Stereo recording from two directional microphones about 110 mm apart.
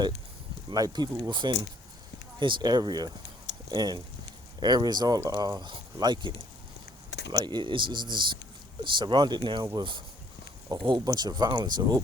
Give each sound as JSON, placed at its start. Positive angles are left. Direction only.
{"t": 0.7, "sound": "speech", "side_deg": -40}
{"t": 7.3, "sound": "speech", "side_deg": -40}